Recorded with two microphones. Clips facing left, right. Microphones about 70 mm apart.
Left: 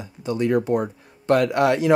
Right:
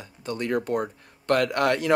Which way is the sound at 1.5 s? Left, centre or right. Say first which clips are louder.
Left 4 dB; right.